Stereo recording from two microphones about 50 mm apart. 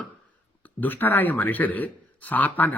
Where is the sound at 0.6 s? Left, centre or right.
Left.